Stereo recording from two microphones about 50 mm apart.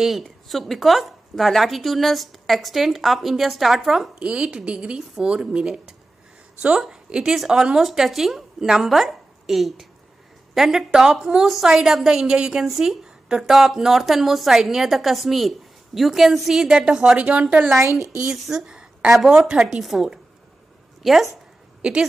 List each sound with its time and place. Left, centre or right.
0.2 s a woman's voice: centre
4.1 s speech: right
7.1 s a woman's voice: centre
12.6 s a woman's voice: centre
13.0 s a sound: centre
13.5 s a woman's voice: centre
17.2 s speech: right
18.5 s a sound: centre
19.3 s a woman's voice: centre
19.8 s a woman's voice: centre